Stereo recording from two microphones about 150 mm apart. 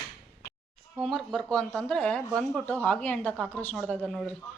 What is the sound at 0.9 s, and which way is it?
Speech, centre (ahead or behind).